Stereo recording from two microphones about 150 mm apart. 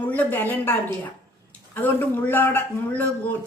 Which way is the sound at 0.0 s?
10° left (ahead or behind).